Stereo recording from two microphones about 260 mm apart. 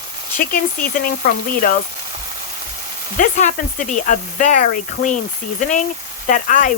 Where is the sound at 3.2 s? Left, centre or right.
Left.